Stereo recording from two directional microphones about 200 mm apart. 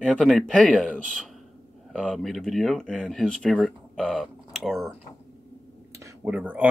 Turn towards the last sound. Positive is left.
turn(degrees=-10)  # may be behind; listen again after turning